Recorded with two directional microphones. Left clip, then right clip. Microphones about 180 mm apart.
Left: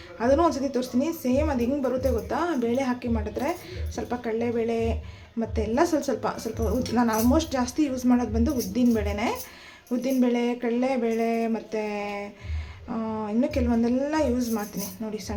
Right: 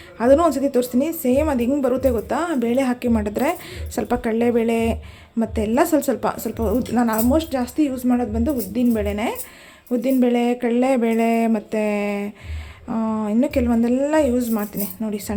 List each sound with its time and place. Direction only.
0.2 s a woman's voice: 35° right (ahead or behind)